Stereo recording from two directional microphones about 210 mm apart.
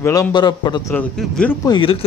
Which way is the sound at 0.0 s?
15° left (ahead or behind).